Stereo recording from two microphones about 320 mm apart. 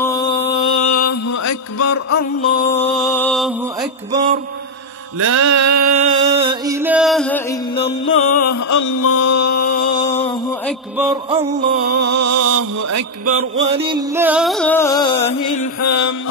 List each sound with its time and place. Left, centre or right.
0.0 s a sound: centre
0.7 s mantra: left
2.5 s music: centre
4.1 s music: right
5.2 s mantra: right
6.3 s music: centre
8.0 s mantra: left
9.6 s a sound: left
11.2 s music: right
11.9 s mantra: right
13.7 s music: centre
15.8 s music: left